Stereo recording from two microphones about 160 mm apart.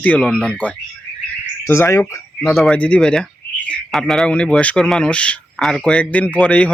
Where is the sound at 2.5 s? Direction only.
Centre (ahead or behind).